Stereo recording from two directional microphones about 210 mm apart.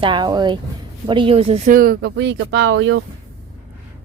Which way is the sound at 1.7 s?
45° right (ahead or behind).